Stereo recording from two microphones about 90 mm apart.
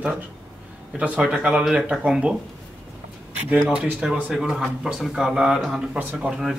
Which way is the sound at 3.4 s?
15° right (ahead or behind).